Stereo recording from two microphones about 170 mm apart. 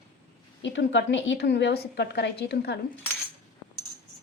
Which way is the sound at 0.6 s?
90° left.